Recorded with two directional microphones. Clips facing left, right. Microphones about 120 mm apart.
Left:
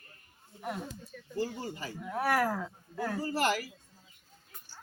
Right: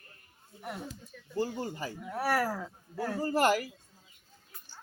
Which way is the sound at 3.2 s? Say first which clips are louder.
Right 5 dB; 45° right (ahead or behind).